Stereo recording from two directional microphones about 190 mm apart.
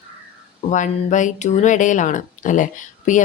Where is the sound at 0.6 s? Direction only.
40° left (ahead or behind).